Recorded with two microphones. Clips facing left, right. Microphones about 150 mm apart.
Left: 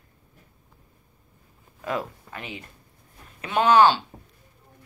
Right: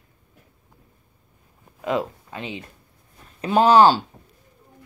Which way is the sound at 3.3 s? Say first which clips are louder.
Right 3 dB; 35° right (ahead or behind).